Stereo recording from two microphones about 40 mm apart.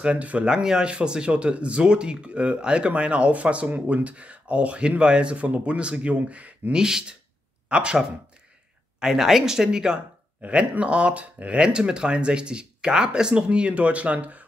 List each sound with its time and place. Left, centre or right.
0.0 s speech: right
0.5 s speech: centre
6.7 s speech: centre
9.0 s speech: centre
10.5 s speech: right